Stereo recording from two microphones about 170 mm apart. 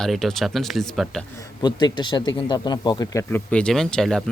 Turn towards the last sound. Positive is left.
turn(degrees=0)  # may be behind; listen again after turning